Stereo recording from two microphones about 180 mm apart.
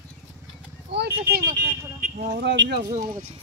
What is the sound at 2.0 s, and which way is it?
Speech, 40° right (ahead or behind).